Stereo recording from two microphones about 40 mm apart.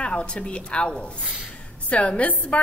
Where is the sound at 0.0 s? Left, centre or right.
Left.